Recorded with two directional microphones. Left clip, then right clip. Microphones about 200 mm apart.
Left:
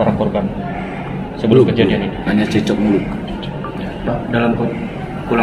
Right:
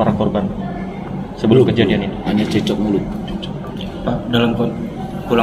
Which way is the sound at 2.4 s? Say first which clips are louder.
Even; 10° left (ahead or behind).